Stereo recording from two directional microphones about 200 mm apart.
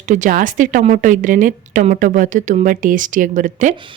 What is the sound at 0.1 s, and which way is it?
A woman's voice, 40° right (ahead or behind).